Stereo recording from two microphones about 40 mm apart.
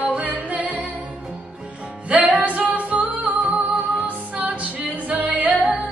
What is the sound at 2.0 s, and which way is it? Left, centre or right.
Music, right.